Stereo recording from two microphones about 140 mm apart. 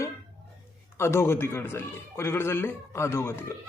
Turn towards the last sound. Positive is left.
turn(degrees=20)  # may be behind; listen again after turning